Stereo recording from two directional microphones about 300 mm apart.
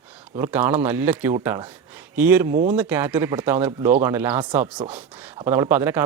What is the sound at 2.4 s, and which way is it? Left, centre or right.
Speech, right.